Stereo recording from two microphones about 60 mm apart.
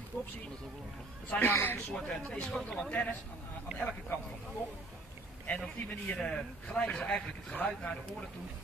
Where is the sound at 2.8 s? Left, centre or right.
Left.